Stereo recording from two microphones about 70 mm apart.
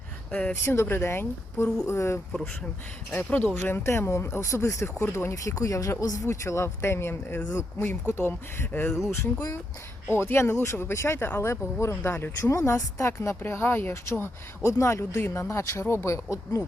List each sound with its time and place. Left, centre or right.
0.3 s speech: centre
0.5 s a woman's voice: left
3.3 s a woman's voice: left
9.1 s a woman's voice: left
12.5 s a woman's voice: left